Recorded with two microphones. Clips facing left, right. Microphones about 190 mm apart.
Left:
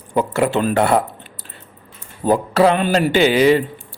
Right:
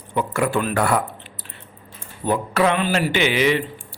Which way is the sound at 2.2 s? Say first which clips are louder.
Left 5 dB; 35° left (ahead or behind).